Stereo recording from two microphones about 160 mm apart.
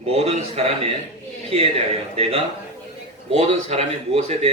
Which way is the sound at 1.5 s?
40° right (ahead or behind).